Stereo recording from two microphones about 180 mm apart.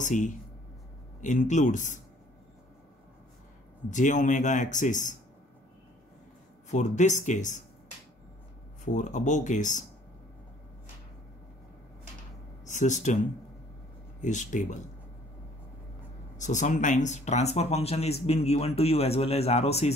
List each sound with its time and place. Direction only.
0.0 s speech: 45° left (ahead or behind)
3.9 s speech: 45° left (ahead or behind)
6.7 s speech: 40° left (ahead or behind)
8.8 s speech: 45° left (ahead or behind)
12.6 s speech: 45° left (ahead or behind)
14.2 s speech: 45° left (ahead or behind)
16.3 s speech: 40° left (ahead or behind)